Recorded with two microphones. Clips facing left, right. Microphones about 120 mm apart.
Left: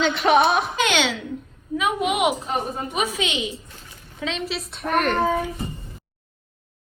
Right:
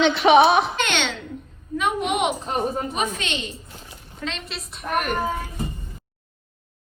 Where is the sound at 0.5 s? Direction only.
Centre (ahead or behind).